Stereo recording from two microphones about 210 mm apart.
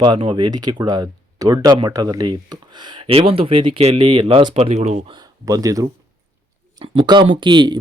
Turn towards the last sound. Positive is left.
turn(degrees=-20)  # may be behind; listen again after turning